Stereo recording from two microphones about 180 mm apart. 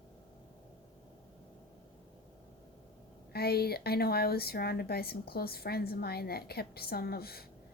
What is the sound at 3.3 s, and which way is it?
A woman's voice, 60° left (ahead or behind).